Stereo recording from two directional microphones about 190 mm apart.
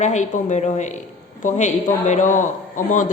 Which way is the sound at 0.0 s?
40° left (ahead or behind).